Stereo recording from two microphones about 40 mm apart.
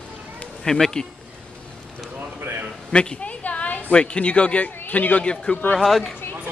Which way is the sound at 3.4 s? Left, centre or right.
Left.